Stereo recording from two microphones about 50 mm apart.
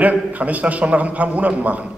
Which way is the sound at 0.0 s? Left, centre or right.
Right.